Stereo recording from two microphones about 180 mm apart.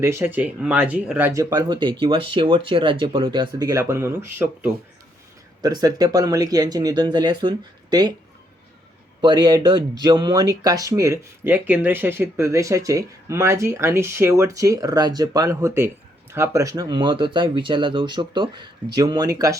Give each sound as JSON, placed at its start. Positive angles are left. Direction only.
{"t": 0.0, "sound": "speech", "side_deg": -15}
{"t": 1.3, "sound": "speech", "side_deg": -20}
{"t": 5.6, "sound": "speech", "side_deg": -20}
{"t": 9.2, "sound": "speech", "side_deg": -25}